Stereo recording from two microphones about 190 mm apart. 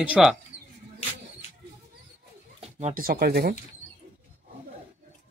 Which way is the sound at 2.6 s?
40° right (ahead or behind).